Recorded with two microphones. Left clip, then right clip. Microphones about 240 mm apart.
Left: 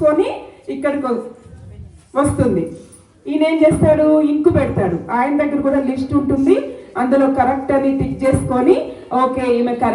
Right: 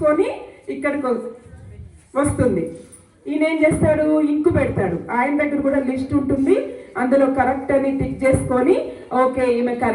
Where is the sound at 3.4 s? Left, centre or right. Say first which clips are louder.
Left 4 dB; left.